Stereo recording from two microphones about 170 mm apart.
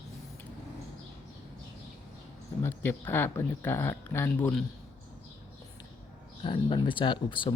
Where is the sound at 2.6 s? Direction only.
10° left (ahead or behind).